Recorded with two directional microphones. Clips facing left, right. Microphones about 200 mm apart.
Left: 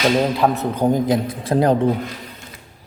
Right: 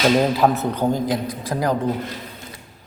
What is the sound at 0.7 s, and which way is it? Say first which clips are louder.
Speech: left 3 dB; 15° left (ahead or behind).